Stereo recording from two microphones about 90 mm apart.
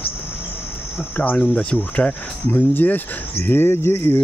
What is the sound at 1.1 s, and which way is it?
Speech, 20° left (ahead or behind).